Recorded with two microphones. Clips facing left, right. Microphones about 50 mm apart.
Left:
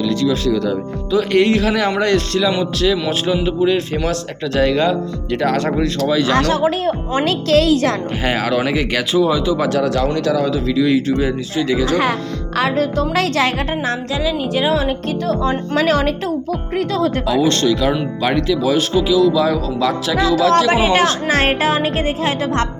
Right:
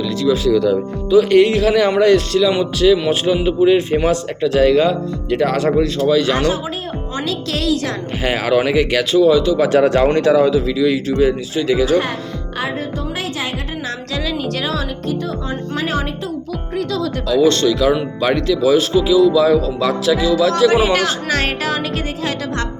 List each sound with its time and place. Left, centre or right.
0.0 s speech: centre
4.5 s speech: centre
6.5 s speech: left
7.2 s a woman's voice: left
8.2 s speech: centre
9.6 s speech: right
10.5 s speech: centre
12.5 s speech: left
14.1 s speech: centre
15.3 s speech: left
16.7 s music: left
17.2 s speech: centre
17.5 s speech: centre
20.7 s music: left